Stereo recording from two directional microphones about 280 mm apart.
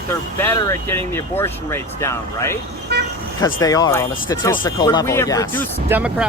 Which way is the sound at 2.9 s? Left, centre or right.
Right.